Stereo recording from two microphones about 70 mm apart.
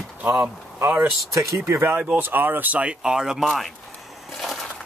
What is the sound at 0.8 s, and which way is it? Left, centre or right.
Speech, right.